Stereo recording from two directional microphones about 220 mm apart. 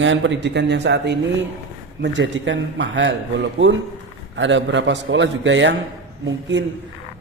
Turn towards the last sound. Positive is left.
turn(degrees=-55)  # may be behind; listen again after turning